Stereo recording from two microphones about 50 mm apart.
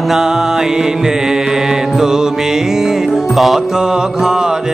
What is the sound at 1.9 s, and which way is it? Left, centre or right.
Music, centre.